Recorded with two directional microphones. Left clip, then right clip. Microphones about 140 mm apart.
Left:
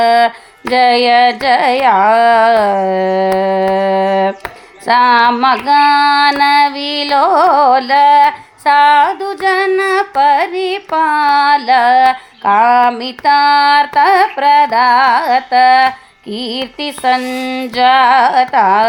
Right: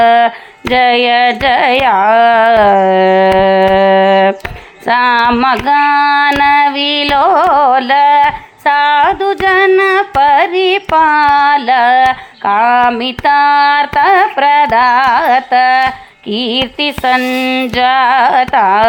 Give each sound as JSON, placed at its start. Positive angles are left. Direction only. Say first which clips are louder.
{"t": 0.0, "sound": "child singing", "louder": "right 2 dB", "side_deg": -20}